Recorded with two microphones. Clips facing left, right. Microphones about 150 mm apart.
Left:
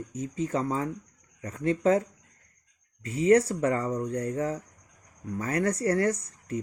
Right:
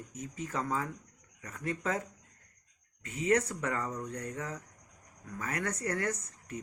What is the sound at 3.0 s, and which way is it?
Speech, 30° left (ahead or behind).